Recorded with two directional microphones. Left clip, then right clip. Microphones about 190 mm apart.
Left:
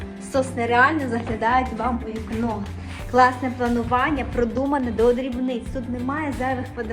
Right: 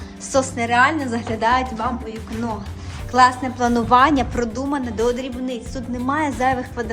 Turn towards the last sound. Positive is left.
turn(degrees=-20)  # may be behind; listen again after turning